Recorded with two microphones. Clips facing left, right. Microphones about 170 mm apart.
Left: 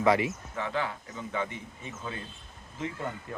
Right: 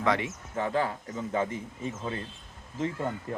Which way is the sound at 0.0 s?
5° left (ahead or behind).